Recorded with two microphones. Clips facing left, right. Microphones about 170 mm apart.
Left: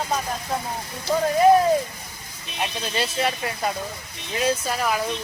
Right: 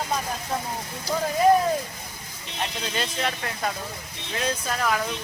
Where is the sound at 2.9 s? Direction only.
10° left (ahead or behind).